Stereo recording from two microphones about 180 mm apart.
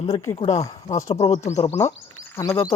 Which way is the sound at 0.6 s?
20° left (ahead or behind).